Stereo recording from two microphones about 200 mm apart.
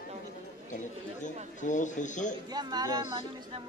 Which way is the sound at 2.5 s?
20° right (ahead or behind).